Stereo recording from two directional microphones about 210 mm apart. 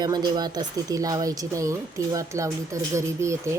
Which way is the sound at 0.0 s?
20° right (ahead or behind).